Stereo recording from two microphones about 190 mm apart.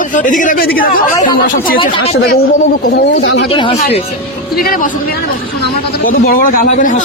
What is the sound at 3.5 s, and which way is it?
Speech, 25° left (ahead or behind).